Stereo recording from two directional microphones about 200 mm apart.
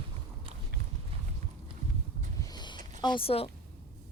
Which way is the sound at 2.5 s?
20° left (ahead or behind).